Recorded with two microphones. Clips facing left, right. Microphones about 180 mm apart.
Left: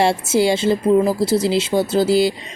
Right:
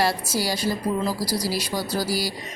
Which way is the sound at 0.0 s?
25° left (ahead or behind).